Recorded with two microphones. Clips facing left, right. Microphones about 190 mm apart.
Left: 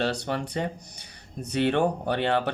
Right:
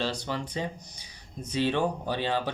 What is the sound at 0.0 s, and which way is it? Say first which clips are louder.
Speech: left 4 dB; 65° left (ahead or behind).